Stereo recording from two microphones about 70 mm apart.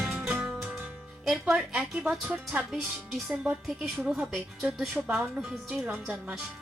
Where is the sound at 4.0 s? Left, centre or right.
Centre.